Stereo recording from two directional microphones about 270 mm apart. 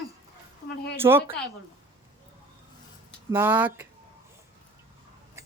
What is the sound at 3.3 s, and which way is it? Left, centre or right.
Speech, centre.